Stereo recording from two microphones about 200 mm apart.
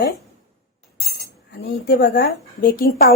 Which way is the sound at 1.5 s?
55° left (ahead or behind).